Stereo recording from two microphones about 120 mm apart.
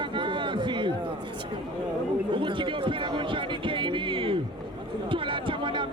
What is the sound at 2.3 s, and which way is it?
Music, 45° right (ahead or behind).